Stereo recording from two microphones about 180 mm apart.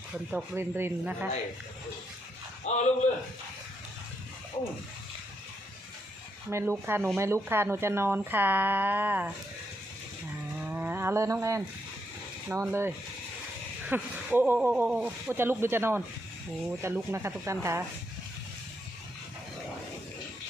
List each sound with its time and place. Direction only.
0.3 s speech: 10° right (ahead or behind)
2.7 s a man's voice: 40° left (ahead or behind)
6.5 s speech: 15° right (ahead or behind)
10.7 s a sound: 10° right (ahead or behind)
12.5 s speech: 15° right (ahead or behind)
13.9 s speech: 10° right (ahead or behind)